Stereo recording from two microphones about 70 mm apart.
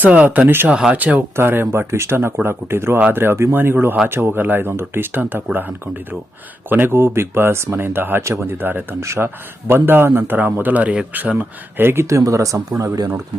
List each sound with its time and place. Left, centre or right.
0.0 s a man's voice: right
0.4 s speech: right
0.7 s speech: centre
1.4 s a man's voice: right
11.8 s speech: right
12.0 s speech: right